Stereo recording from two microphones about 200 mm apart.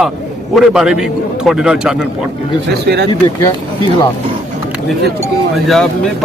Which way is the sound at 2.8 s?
55° right (ahead or behind).